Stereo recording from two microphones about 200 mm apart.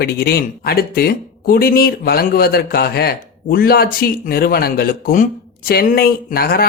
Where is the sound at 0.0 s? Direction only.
50° left (ahead or behind).